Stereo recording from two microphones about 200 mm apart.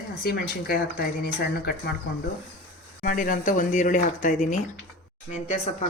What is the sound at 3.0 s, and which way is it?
Speech, 45° left (ahead or behind).